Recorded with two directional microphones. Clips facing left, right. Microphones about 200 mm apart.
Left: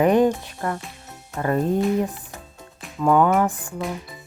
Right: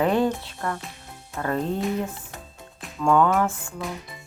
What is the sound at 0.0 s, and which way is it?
Speech, 15° left (ahead or behind).